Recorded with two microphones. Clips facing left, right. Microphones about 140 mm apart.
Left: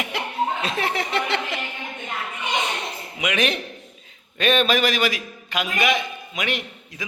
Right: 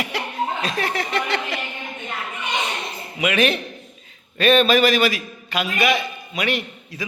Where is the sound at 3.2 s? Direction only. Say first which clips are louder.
Right 4 dB; 15° left (ahead or behind).